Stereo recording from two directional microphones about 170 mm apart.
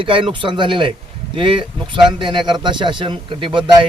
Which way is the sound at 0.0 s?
30° right (ahead or behind).